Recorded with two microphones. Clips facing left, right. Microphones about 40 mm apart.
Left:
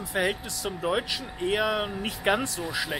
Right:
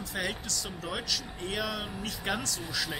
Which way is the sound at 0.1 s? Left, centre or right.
Left.